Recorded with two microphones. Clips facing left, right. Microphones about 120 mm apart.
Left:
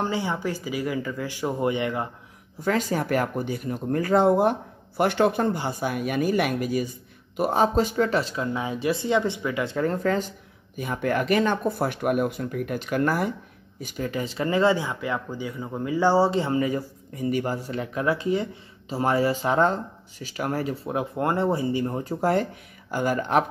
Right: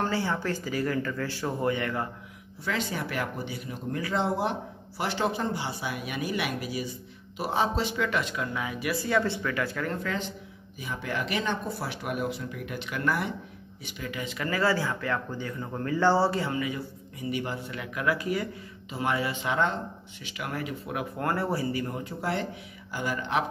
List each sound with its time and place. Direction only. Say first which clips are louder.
0.0 s speech: left 2 dB; 15° left (ahead or behind)
2.6 s speech: left 7 dB; 45° left (ahead or behind); by 9.9 s 25° left (ahead or behind)
9.9 s speech: left 7 dB; 40° left (ahead or behind)
10.8 s speech: left 8 dB; 50° left (ahead or behind); by 16.3 s 15° left (ahead or behind)
16.3 s speech: left 6 dB; 35° left (ahead or behind)
18.9 s speech: left 6 dB; 35° left (ahead or behind)
22.0 s speech: left 8 dB; 45° left (ahead or behind)